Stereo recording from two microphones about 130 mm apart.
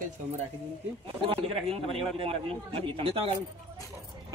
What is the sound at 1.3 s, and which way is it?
A man's voice, 45° right (ahead or behind).